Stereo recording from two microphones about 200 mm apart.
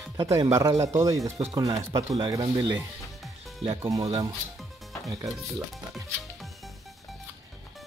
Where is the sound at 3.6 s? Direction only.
30° right (ahead or behind).